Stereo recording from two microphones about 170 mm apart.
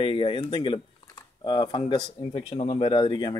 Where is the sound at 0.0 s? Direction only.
30° left (ahead or behind).